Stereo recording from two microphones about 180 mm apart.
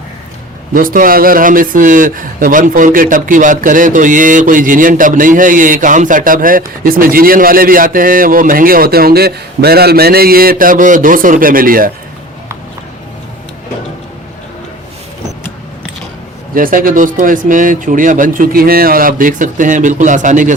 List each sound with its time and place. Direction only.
0.7 s speech: 50° right (ahead or behind)
16.6 s speech: 50° right (ahead or behind)